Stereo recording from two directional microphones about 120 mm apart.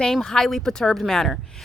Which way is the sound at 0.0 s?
5° left (ahead or behind).